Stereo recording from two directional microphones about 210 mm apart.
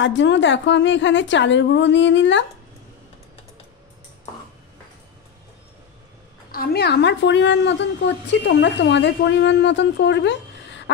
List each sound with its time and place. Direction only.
0.0 s a woman's voice: 60° left (ahead or behind)
6.5 s a woman's voice: 45° left (ahead or behind)